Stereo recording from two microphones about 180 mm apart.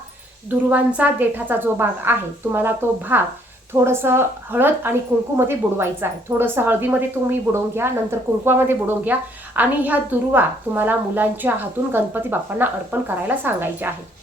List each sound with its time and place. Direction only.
0.7 s a woman's voice: 10° right (ahead or behind)